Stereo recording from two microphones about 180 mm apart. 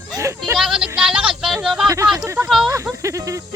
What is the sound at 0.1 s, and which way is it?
Bleat, 15° right (ahead or behind).